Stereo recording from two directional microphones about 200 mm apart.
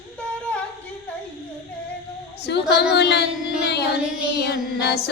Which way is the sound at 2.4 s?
55° left (ahead or behind).